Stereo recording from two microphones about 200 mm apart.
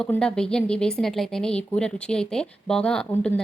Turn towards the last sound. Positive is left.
turn(degrees=5)  # may be behind; listen again after turning